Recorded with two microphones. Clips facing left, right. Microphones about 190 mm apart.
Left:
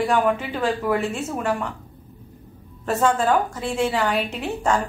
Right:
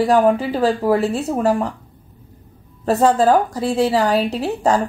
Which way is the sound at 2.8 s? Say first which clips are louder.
Right 6 dB; 35° right (ahead or behind).